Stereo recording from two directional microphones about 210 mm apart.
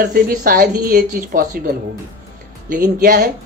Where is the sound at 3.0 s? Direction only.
40° right (ahead or behind).